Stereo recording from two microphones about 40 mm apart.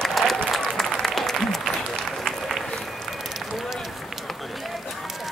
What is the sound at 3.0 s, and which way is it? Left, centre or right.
Run, centre.